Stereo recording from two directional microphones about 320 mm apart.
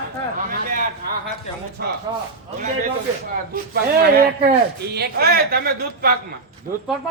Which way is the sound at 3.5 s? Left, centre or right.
Right.